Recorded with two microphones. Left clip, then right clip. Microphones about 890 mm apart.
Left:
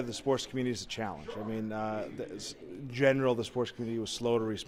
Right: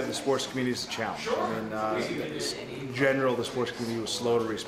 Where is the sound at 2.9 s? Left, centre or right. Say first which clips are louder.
Right 2 dB; left.